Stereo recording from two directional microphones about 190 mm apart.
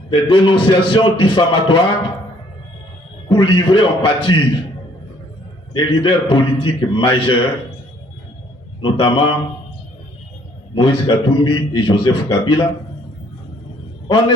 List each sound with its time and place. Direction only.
0.1 s a man's voice: 25° left (ahead or behind)
3.2 s a man's voice: 25° left (ahead or behind)
5.7 s a man's voice: 25° left (ahead or behind)
8.8 s a man's voice: 25° left (ahead or behind)
10.8 s a man's voice: 25° left (ahead or behind)